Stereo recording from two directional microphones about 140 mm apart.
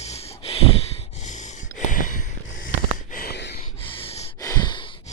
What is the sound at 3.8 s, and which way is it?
Snort, 40° left (ahead or behind).